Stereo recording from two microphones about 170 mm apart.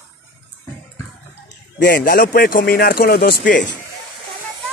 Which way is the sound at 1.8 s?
65° left (ahead or behind).